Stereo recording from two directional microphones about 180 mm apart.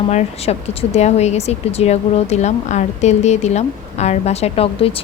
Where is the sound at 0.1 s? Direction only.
35° left (ahead or behind).